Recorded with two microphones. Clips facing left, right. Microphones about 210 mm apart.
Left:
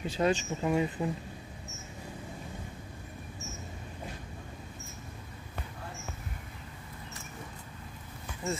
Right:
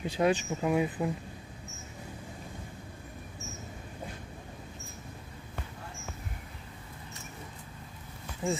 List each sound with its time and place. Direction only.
0.0 s speech: 15° right (ahead or behind)
8.4 s speech: 15° right (ahead or behind)